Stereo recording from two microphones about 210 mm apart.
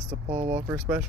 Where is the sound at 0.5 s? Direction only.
10° right (ahead or behind).